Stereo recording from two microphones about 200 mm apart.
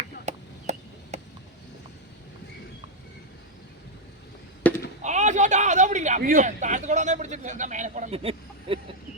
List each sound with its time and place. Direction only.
0.3 s chop: 35° right (ahead or behind)
4.7 s a sound: 5° left (ahead or behind)
5.0 s a man's voice: 35° right (ahead or behind)